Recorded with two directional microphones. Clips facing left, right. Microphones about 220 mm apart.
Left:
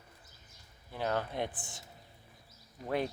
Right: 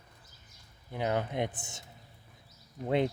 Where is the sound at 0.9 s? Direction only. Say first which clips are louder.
Right 3 dB; 15° right (ahead or behind).